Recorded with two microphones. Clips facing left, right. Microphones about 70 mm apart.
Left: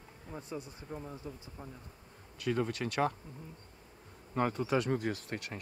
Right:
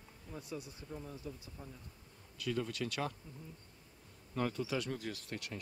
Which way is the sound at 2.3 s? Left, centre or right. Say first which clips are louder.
Left 5 dB; left.